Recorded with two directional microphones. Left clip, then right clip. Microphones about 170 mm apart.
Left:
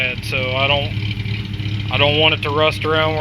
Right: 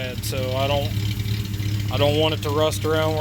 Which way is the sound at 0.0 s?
40° right (ahead or behind).